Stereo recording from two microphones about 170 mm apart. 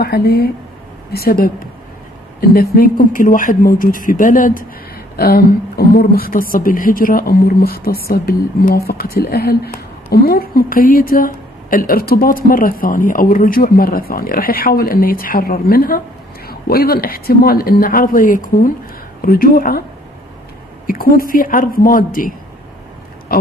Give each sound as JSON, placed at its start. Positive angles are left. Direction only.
{"t": 0.0, "sound": "a woman's voice", "side_deg": 65}
{"t": 20.8, "sound": "a woman's voice", "side_deg": 55}
{"t": 23.3, "sound": "a sound", "side_deg": 60}